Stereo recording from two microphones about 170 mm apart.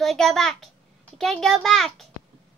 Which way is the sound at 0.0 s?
Centre (ahead or behind).